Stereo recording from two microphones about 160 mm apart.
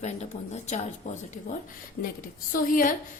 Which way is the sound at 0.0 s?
45° left (ahead or behind).